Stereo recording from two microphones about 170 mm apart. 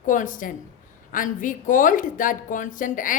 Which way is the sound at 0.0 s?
50° left (ahead or behind).